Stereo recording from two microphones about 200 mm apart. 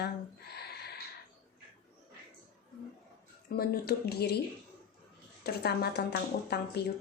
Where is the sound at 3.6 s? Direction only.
50° left (ahead or behind).